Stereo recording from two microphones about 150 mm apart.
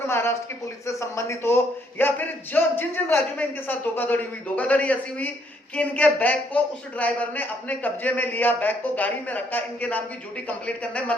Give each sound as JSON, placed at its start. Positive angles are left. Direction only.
{"t": 0.1, "sound": "a man's voice", "side_deg": 15}